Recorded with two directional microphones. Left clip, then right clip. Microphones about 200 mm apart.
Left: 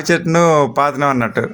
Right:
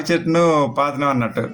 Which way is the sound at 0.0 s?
40° left (ahead or behind).